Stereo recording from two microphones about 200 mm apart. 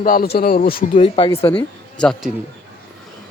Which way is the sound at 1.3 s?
15° left (ahead or behind).